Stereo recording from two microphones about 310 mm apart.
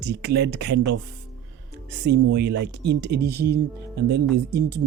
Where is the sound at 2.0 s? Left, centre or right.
Right.